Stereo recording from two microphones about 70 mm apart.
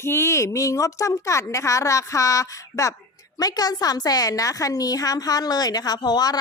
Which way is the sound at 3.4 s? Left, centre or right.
Left.